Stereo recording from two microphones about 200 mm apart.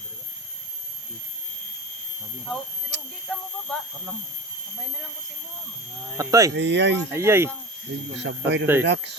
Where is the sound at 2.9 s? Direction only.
60° right (ahead or behind).